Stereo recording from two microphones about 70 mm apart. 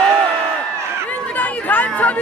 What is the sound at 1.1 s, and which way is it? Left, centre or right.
Chatter, left.